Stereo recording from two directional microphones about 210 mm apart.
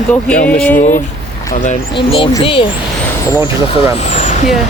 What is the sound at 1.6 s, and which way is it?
Speech, 30° left (ahead or behind).